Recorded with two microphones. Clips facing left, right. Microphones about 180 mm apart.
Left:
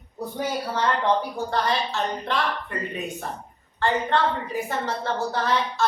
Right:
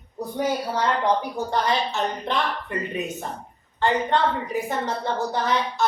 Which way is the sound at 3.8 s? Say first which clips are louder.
Right 1 dB; 20° right (ahead or behind).